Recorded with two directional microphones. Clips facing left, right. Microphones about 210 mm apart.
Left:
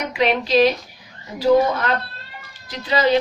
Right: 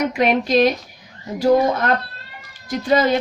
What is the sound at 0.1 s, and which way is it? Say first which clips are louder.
Speech: right 2 dB; 50° right (ahead or behind).